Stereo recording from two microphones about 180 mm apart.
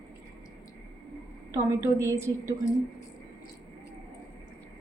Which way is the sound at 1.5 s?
15° right (ahead or behind).